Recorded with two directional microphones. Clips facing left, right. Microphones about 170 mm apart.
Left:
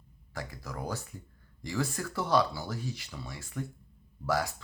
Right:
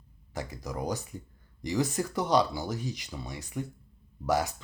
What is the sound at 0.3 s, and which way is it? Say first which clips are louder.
Speech: right 4 dB; 20° right (ahead or behind).